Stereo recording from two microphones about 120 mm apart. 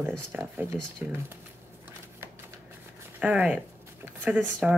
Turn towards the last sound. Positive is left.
turn(degrees=-10)  # may be behind; listen again after turning